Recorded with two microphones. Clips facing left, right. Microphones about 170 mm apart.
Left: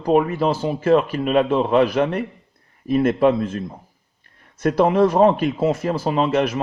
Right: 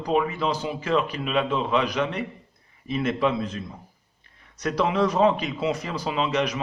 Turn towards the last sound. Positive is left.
turn(degrees=50)  # may be behind; listen again after turning